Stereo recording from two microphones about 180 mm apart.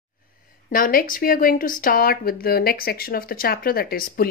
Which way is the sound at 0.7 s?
50° left (ahead or behind).